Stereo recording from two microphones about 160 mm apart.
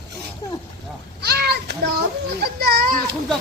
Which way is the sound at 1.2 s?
85° right.